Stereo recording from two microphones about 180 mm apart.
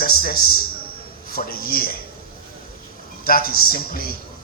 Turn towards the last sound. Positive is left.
turn(degrees=55)  # may be behind; listen again after turning